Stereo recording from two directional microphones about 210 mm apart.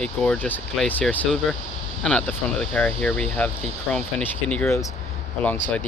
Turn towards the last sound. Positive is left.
turn(degrees=10)  # may be behind; listen again after turning